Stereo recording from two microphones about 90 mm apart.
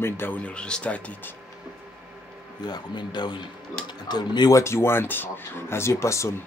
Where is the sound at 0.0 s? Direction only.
20° left (ahead or behind).